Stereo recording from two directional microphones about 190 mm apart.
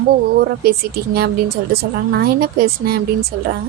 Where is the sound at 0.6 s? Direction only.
55° right (ahead or behind).